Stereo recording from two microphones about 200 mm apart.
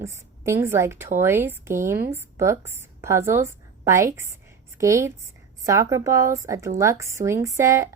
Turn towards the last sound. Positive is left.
turn(degrees=-15)  # may be behind; listen again after turning